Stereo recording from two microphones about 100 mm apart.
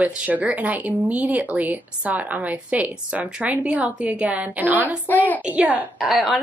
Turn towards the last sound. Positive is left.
turn(degrees=0)  # may be behind; listen again after turning